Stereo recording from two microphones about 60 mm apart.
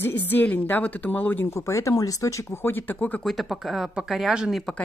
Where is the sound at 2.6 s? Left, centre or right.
Left.